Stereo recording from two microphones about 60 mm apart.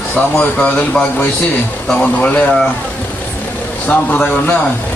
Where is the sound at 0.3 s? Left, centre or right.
Centre.